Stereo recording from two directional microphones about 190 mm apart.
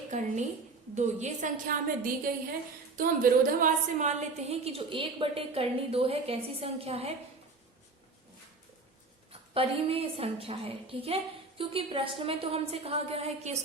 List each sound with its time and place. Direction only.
0.1 s a woman's voice: 40° right (ahead or behind)
3.0 s a woman's voice: 45° right (ahead or behind)
9.6 s a woman's voice: 30° right (ahead or behind)